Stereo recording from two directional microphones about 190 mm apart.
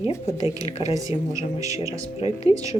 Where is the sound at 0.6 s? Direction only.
35° left (ahead or behind).